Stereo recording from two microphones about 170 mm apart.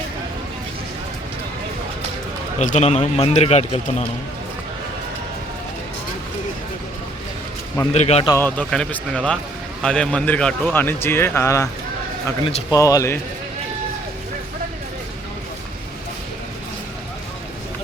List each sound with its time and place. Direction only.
2.6 s speech: 45° left (ahead or behind)
7.9 s speech: 40° left (ahead or behind)
8.3 s speech: 10° left (ahead or behind)
12.7 s speech: 20° left (ahead or behind)